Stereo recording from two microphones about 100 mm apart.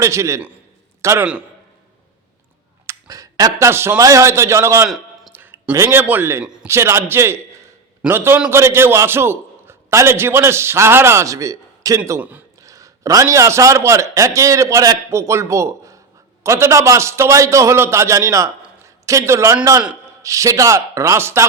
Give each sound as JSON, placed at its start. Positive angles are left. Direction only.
{"t": 0.0, "sound": "a man's voice", "side_deg": -30}
{"t": 1.2, "sound": "a man's voice", "side_deg": -15}
{"t": 2.8, "sound": "a sound", "side_deg": -35}
{"t": 3.7, "sound": "a man's voice", "side_deg": -25}
{"t": 4.9, "sound": "a sound", "side_deg": 0}
{"t": 5.3, "sound": "a sound", "side_deg": -20}
{"t": 5.7, "sound": "a man's voice", "side_deg": -25}
{"t": 6.4, "sound": "a man's voice", "side_deg": -10}
{"t": 6.7, "sound": "a man's voice", "side_deg": -25}